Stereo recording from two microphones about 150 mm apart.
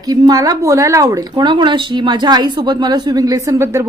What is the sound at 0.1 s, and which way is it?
Speech, 25° right (ahead or behind).